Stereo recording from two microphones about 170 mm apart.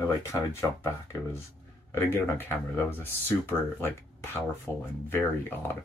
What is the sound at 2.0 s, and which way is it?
Speech, 10° left (ahead or behind).